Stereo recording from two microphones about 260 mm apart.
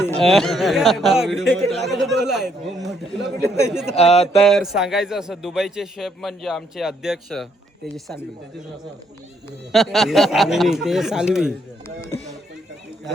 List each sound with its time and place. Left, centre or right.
0.0 s a man's voice: centre
3.4 s speech: centre
3.9 s speech: left
4.4 s a man's voice: centre
9.7 s a man's voice: centre